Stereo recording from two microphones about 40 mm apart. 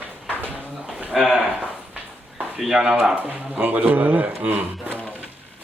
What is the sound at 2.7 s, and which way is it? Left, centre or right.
Speech, centre.